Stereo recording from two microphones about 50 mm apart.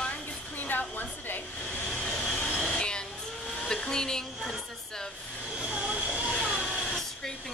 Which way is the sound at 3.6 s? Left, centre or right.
Centre.